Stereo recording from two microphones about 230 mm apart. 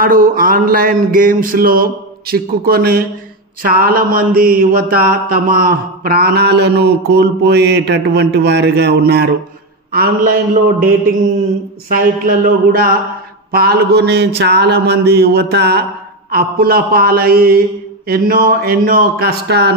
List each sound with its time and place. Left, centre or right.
0.0 s mantra: right
10.8 s mantra: right